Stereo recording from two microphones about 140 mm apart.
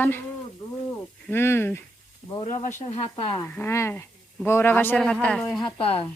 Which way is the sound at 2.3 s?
50° left (ahead or behind).